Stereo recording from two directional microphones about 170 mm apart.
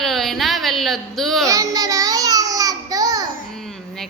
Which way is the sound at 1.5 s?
20° right (ahead or behind).